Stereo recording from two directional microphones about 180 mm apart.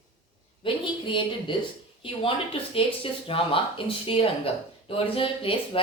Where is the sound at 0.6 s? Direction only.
30° left (ahead or behind).